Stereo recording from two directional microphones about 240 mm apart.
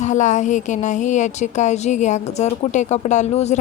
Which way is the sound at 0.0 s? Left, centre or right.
Left.